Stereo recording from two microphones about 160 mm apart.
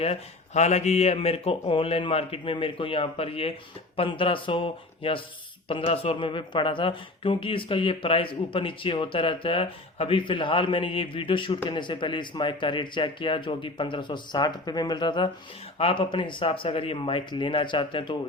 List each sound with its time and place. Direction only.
0.0 s speech: 40° left (ahead or behind)